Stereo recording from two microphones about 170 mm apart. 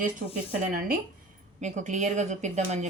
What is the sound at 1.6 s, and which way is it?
A woman's voice, 45° right (ahead or behind).